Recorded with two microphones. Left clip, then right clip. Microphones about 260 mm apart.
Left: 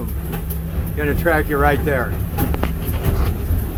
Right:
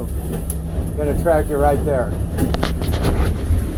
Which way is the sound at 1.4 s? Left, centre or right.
Left.